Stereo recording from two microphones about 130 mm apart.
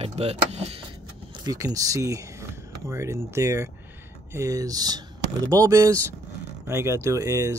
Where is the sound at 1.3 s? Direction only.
30° right (ahead or behind).